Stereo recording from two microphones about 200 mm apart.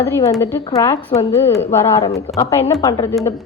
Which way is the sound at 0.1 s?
15° left (ahead or behind).